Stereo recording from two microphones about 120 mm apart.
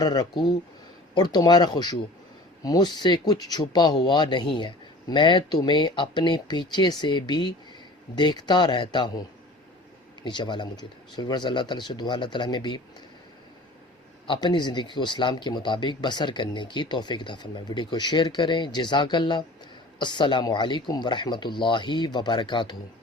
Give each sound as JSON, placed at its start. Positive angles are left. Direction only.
{"t": 0.0, "sound": "speech", "side_deg": 35}
{"t": 10.2, "sound": "speech", "side_deg": 40}
{"t": 14.3, "sound": "speech", "side_deg": 40}